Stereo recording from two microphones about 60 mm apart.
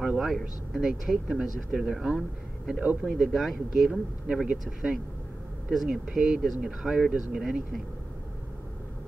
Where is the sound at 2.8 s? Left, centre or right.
Right.